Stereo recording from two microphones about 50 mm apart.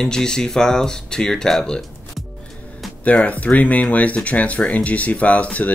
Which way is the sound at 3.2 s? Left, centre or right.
Left.